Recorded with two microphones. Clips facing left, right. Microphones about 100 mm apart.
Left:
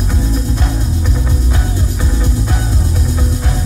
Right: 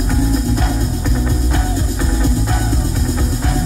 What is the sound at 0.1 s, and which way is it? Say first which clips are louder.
Music: right 4 dB; centre (ahead or behind).